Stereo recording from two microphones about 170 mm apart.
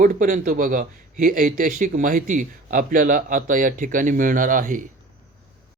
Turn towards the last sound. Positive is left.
turn(degrees=-50)  # may be behind; listen again after turning